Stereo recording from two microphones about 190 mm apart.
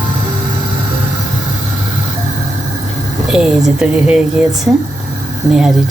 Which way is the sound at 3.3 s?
5° right (ahead or behind).